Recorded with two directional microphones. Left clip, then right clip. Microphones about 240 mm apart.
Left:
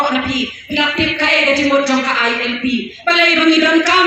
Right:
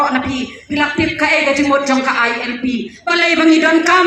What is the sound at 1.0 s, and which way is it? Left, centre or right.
Music, right.